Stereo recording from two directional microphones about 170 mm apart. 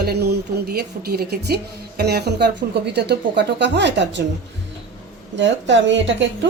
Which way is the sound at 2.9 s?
90° right.